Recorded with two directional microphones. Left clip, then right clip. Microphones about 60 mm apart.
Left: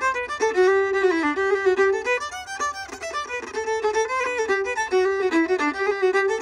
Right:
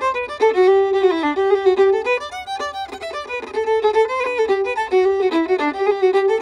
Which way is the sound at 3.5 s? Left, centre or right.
Right.